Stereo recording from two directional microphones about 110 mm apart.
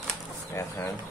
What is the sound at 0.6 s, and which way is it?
Speech, 25° left (ahead or behind).